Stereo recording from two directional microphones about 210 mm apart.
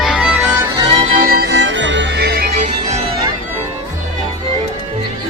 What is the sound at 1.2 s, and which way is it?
Music, 50° right (ahead or behind).